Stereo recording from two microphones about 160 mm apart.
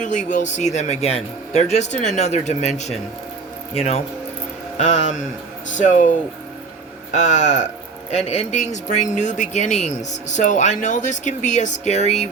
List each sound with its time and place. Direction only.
0.0 s speech: 50° left (ahead or behind)